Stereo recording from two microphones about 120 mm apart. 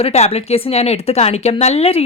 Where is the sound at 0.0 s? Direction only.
60° left (ahead or behind).